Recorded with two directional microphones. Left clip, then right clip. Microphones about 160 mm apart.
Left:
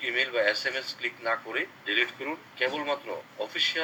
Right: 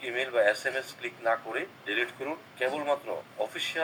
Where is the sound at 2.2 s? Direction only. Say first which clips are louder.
Left 2 dB; 25° left (ahead or behind).